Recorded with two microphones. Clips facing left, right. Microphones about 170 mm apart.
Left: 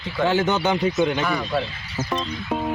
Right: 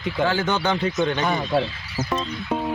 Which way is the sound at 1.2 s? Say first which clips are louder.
Right 2 dB; 20° right (ahead or behind).